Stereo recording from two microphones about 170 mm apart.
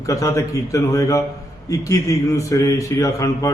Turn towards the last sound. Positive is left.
turn(degrees=20)  # may be behind; listen again after turning